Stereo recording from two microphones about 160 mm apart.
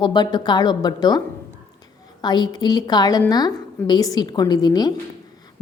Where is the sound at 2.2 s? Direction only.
25° left (ahead or behind).